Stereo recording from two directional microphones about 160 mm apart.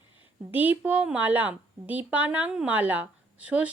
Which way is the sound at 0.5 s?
10° right (ahead or behind).